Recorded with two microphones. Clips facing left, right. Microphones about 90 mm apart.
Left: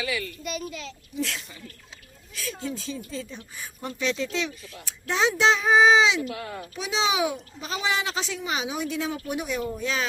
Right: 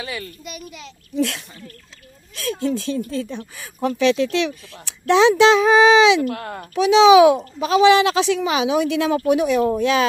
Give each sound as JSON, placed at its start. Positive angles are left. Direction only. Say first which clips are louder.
{"t": 0.0, "sound": "a child's voice", "louder": "even", "side_deg": -35}
{"t": 0.4, "sound": "a child's voice", "louder": "left 2 dB", "side_deg": -15}
{"t": 1.1, "sound": "speech", "louder": "right 9 dB", "side_deg": -60}
{"t": 6.8, "sound": "a child's voice", "louder": "right 15 dB", "side_deg": -85}